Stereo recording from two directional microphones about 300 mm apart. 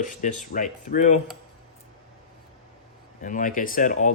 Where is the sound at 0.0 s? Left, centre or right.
Left.